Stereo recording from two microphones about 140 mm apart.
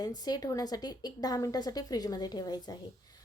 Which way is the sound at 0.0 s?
30° left (ahead or behind).